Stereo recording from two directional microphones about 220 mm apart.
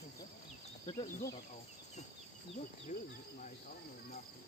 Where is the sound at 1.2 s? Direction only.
15° left (ahead or behind).